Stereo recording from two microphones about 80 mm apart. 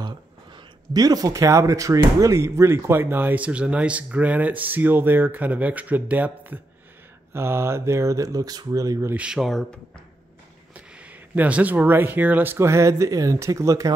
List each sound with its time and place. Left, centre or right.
0.0 s a sound: right
0.9 s speech: right
9.1 s speech: centre
9.4 s speech: centre
10.7 s speech: centre
12.5 s speech: right